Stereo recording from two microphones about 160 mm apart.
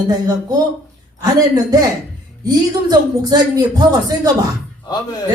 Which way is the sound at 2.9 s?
25° right (ahead or behind).